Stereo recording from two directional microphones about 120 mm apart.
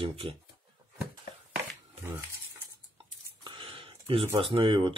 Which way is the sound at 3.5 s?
45° right (ahead or behind).